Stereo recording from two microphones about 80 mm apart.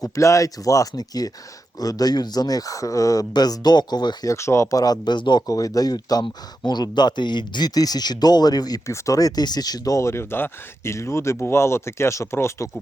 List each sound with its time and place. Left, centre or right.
0.0 s speech: left
4.3 s speech: left
4.8 s speech: left
5.5 s speech: left
8.9 s speech: left